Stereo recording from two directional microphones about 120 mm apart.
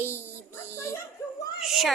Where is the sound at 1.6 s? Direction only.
Centre (ahead or behind).